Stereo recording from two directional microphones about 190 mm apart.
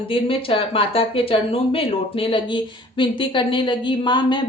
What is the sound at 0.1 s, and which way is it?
Speech, 30° left (ahead or behind).